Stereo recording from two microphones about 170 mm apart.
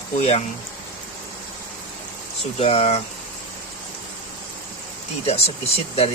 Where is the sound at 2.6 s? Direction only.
35° left (ahead or behind).